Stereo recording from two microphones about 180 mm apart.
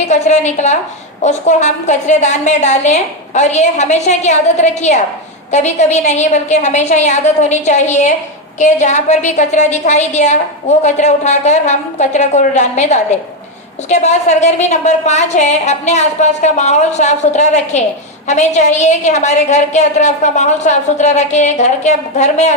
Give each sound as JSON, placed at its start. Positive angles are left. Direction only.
{"t": 0.1, "sound": "a woman's voice", "side_deg": 40}